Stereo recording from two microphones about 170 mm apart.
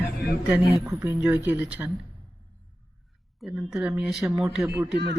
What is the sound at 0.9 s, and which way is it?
Speech, 10° right (ahead or behind).